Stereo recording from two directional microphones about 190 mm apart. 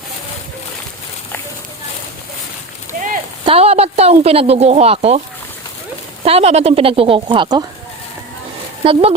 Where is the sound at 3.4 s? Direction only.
30° right (ahead or behind).